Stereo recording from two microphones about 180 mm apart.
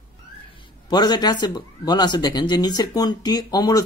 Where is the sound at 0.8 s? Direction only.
25° left (ahead or behind).